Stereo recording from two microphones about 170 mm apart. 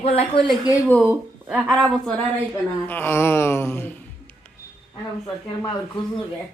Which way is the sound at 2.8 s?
10° left (ahead or behind).